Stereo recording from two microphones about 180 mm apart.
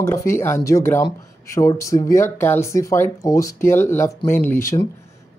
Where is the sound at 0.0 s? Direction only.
15° left (ahead or behind).